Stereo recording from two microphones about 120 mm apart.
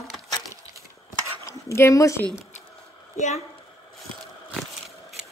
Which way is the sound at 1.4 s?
20° left (ahead or behind).